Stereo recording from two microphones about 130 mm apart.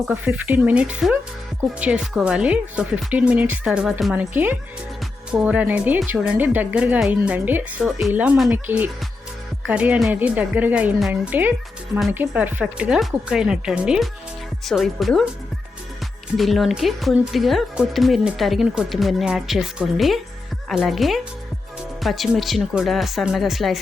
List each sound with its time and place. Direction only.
0.1 s speech: 15° right (ahead or behind)
16.4 s speech: centre (ahead or behind)